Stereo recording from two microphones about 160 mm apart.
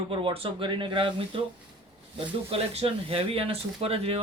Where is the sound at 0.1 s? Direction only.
35° right (ahead or behind).